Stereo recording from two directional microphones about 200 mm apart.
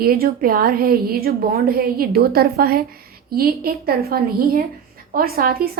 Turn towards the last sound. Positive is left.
turn(degrees=-50)  # may be behind; listen again after turning